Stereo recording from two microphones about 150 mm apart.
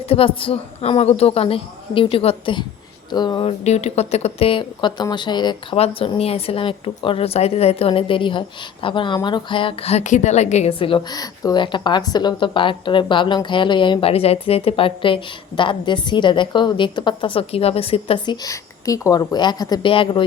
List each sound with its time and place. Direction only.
0.1 s speech: 40° left (ahead or behind)
3.6 s speech: 45° left (ahead or behind)
18.4 s a woman's voice: 20° left (ahead or behind)